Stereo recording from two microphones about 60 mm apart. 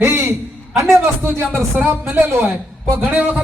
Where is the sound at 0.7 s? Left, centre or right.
Centre.